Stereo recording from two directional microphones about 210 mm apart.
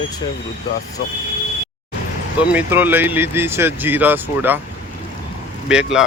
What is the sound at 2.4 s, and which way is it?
Speech, 10° right (ahead or behind).